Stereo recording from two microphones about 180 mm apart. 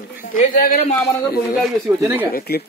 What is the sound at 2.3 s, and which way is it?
Speech, 60° left (ahead or behind).